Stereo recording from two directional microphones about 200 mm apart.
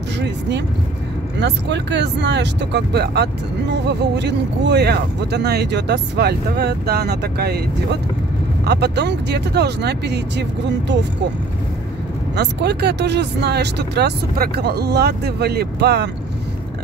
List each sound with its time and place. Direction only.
1.4 s speech: 60° right (ahead or behind)
12.4 s speech: 55° right (ahead or behind)